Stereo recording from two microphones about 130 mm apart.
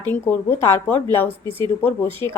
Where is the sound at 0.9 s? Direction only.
20° left (ahead or behind).